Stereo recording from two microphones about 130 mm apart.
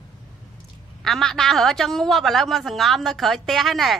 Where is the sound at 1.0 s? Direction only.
5° left (ahead or behind).